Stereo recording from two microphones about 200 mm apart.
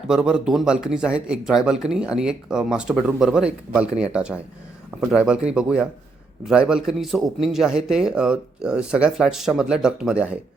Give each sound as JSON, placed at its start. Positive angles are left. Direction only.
{"t": 0.1, "sound": "a man's voice", "side_deg": -5}